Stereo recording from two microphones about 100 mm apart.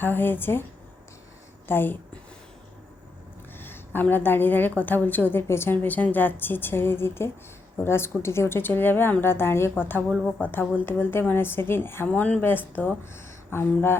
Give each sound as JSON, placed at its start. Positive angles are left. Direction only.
{"t": 0.0, "sound": "a woman's voice", "side_deg": 20}
{"t": 1.6, "sound": "speech", "side_deg": 20}
{"t": 3.6, "sound": "a woman's voice", "side_deg": 20}
{"t": 10.1, "sound": "speech", "side_deg": 5}
{"t": 10.4, "sound": "a woman's voice", "side_deg": 15}